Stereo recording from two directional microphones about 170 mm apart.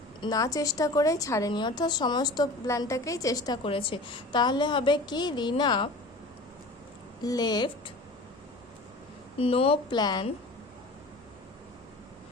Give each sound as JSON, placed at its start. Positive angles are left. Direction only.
{"t": 0.2, "sound": "a woman's voice", "side_deg": 20}
{"t": 7.2, "sound": "a woman's voice", "side_deg": 25}
{"t": 9.4, "sound": "speech", "side_deg": 35}